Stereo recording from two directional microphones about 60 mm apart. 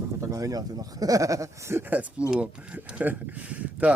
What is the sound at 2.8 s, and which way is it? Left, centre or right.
Speech, right.